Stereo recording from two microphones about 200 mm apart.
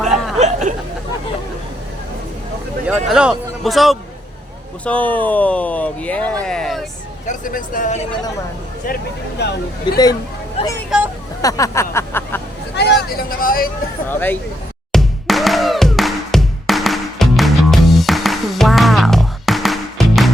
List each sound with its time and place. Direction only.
0.0 s a sound: centre (ahead or behind)
0.3 s snicker: 35° right (ahead or behind)
3.1 s speech: 5° right (ahead or behind)
7.3 s speech: 45° left (ahead or behind)
9.4 s speech: 55° left (ahead or behind)
10.9 s speech: centre (ahead or behind)
11.4 s a sound: 15° left (ahead or behind)
12.7 s vehicle: 55° left (ahead or behind)
14.9 s music: centre (ahead or behind)